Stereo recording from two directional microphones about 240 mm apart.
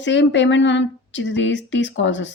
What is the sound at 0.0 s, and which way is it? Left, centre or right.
Speech, left.